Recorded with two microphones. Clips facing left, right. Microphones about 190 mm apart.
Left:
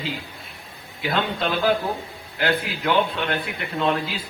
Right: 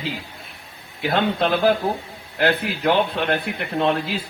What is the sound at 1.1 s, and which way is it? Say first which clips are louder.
A man's voice: right 4 dB; 55° right (ahead or behind).